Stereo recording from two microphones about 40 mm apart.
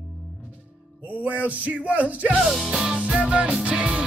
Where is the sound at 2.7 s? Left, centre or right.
Right.